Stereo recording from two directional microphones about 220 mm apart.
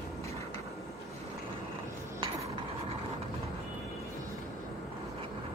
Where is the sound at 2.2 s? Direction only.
20° right (ahead or behind).